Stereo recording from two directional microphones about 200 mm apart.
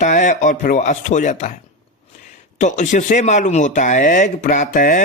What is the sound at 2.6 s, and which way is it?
A man's voice, 35° left (ahead or behind).